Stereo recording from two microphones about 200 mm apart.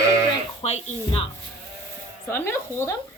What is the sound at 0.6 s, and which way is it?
Speech, 30° left (ahead or behind).